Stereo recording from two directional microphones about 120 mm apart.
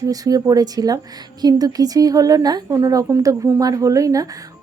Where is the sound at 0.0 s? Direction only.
30° right (ahead or behind).